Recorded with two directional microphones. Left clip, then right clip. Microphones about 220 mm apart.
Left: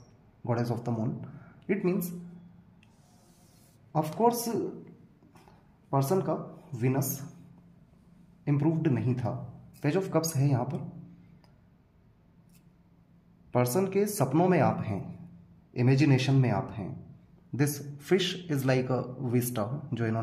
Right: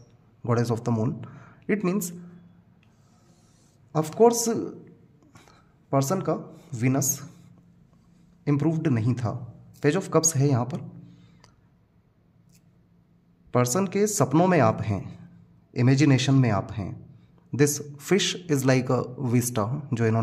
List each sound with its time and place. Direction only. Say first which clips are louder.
0.4 s a man's voice: right 6 dB; 40° right (ahead or behind)
3.9 s speech: right 6 dB; 45° right (ahead or behind)
5.9 s speech: right 3 dB; 45° right (ahead or behind)
8.5 s a man's voice: right 3 dB; 40° right (ahead or behind)
13.5 s a man's voice: right 3 dB; 35° right (ahead or behind)